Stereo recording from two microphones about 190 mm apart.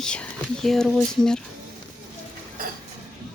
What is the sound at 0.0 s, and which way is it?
Speech, 5° left (ahead or behind).